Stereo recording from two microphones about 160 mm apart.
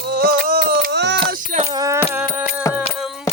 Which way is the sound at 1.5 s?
40° right (ahead or behind).